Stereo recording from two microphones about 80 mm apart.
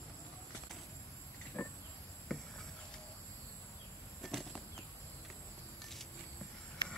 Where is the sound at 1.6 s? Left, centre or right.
Left.